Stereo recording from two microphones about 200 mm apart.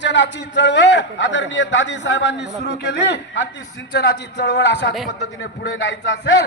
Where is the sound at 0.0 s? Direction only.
65° left (ahead or behind).